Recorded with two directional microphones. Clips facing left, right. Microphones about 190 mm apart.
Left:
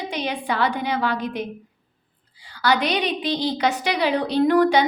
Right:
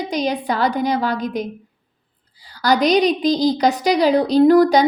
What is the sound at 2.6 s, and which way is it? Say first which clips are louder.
A woman's voice: right 6 dB; 40° right (ahead or behind).